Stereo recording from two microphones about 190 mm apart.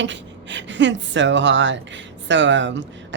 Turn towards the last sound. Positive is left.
turn(degrees=-70)  # may be behind; listen again after turning